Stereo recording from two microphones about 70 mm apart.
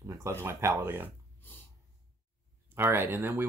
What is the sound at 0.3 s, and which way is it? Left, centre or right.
Speech, right.